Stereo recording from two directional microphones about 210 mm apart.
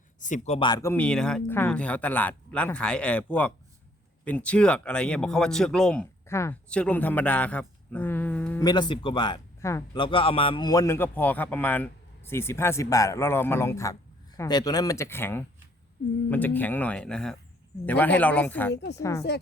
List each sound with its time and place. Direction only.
0.2 s speech: 35° left (ahead or behind)
0.7 s speech: 15° left (ahead or behind)
8.6 s a man's voice: 20° left (ahead or behind)
18.7 s a woman's voice: 55° left (ahead or behind)
18.9 s a man's voice: 15° left (ahead or behind)